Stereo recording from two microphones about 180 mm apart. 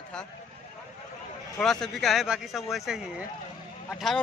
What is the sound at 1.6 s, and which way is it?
Speech, centre (ahead or behind).